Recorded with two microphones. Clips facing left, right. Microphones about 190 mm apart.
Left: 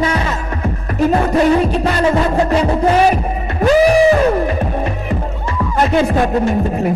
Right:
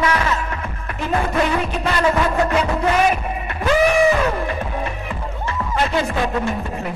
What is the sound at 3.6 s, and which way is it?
Music, 35° left (ahead or behind).